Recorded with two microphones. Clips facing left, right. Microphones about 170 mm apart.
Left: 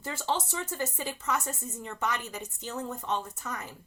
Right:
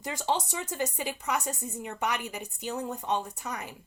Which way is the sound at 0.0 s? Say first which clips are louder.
Right 2 dB; 15° right (ahead or behind).